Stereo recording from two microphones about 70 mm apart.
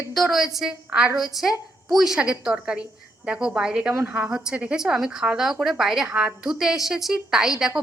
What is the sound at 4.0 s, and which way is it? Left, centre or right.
A woman's voice, right.